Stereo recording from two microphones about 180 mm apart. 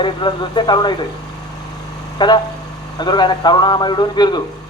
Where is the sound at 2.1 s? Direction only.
25° left (ahead or behind).